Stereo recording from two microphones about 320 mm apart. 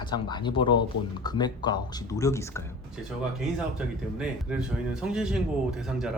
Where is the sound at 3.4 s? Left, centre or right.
Centre.